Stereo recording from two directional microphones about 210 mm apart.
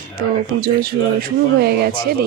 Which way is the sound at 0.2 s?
45° right (ahead or behind).